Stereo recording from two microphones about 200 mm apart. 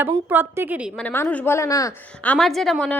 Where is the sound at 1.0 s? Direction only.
5° left (ahead or behind).